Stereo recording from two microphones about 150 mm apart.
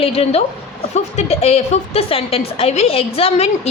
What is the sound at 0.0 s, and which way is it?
A woman's voice, 40° left (ahead or behind).